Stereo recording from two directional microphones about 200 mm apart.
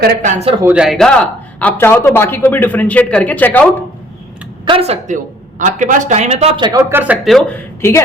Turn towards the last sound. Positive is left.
turn(degrees=10)  # may be behind; listen again after turning